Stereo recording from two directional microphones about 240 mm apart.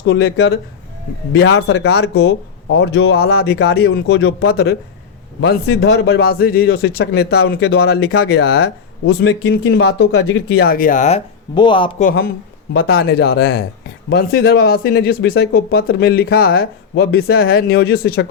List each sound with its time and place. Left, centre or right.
0.0 s speech: left
1.5 s a man's voice: left
12.0 s a man's voice: left